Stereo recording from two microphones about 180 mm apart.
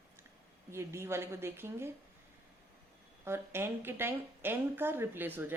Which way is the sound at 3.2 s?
15° right (ahead or behind).